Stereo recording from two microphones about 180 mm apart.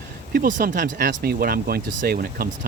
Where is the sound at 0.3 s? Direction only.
50° right (ahead or behind).